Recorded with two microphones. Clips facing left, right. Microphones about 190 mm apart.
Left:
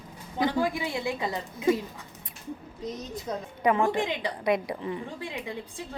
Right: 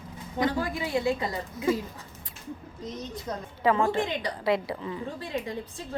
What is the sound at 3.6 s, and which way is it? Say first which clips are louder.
A woman's voice: even; 20° left (ahead or behind).